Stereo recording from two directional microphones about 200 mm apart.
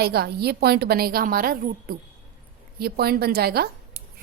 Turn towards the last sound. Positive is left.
turn(degrees=-50)  # may be behind; listen again after turning